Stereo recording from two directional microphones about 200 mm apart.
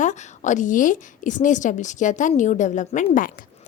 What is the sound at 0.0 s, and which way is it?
A woman's voice, 35° left (ahead or behind).